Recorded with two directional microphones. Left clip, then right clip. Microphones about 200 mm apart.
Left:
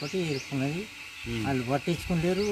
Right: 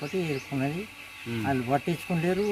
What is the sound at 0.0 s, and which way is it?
Speech, centre (ahead or behind).